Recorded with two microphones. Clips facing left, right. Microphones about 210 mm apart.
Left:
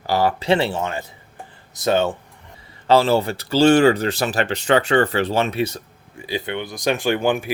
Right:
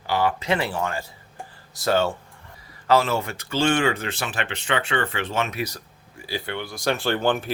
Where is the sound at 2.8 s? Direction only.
30° left (ahead or behind).